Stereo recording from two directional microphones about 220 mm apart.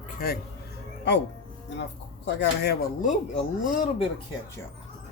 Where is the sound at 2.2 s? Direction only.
50° left (ahead or behind).